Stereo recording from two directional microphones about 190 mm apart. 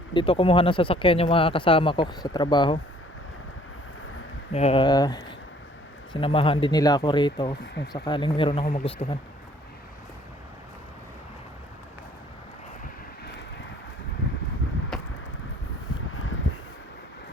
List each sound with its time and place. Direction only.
0.1 s speech: 25° left (ahead or behind)
4.5 s speech: 30° left (ahead or behind)
16.1 s a sound: 90° left